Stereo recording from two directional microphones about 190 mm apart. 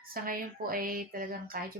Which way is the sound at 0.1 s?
50° right (ahead or behind).